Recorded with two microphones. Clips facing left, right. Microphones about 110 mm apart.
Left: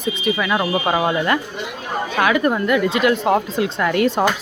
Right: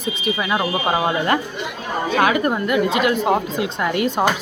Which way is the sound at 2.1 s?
25° right (ahead or behind).